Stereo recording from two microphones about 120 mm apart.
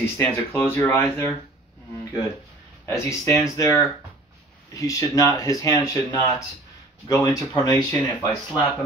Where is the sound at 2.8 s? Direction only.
25° left (ahead or behind).